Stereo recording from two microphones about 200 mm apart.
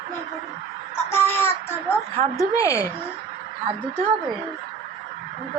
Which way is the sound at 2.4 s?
15° left (ahead or behind).